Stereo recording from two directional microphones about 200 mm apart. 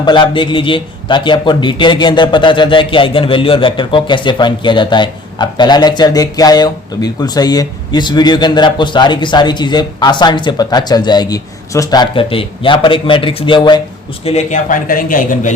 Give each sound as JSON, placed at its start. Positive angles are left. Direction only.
{"t": 0.0, "sound": "a man's voice", "side_deg": 25}
{"t": 14.3, "sound": "a man's voice", "side_deg": 35}